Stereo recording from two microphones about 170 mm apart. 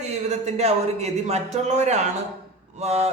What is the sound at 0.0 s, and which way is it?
A man's voice, 40° right (ahead or behind).